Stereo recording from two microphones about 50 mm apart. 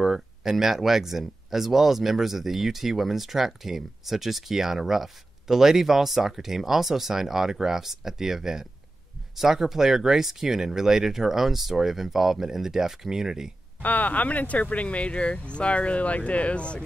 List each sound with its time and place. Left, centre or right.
0.0 s speech: centre
13.8 s speech: left